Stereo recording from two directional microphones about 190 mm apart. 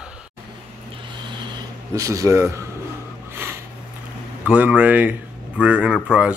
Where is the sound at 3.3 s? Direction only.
10° right (ahead or behind).